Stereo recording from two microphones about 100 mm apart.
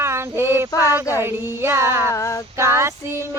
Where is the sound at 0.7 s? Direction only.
35° left (ahead or behind).